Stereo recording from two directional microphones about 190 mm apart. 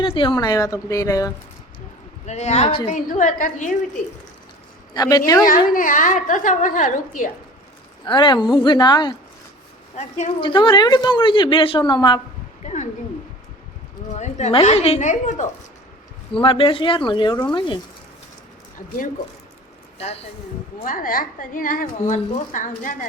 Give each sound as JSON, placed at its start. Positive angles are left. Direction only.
{"t": 0.0, "sound": "a woman's voice", "side_deg": 25}
{"t": 2.2, "sound": "a woman's voice", "side_deg": 35}
{"t": 4.9, "sound": "a woman's voice", "side_deg": 20}
{"t": 5.5, "sound": "a woman's voice", "side_deg": 45}
{"t": 8.0, "sound": "a woman's voice", "side_deg": 25}
{"t": 9.9, "sound": "a woman's voice", "side_deg": 35}
{"t": 12.6, "sound": "a sound", "side_deg": 40}
{"t": 14.2, "sound": "a woman's voice", "side_deg": 35}
{"t": 16.3, "sound": "a woman's voice", "side_deg": 30}
{"t": 20.0, "sound": "a woman's voice", "side_deg": 35}
{"t": 20.8, "sound": "a woman's voice", "side_deg": 45}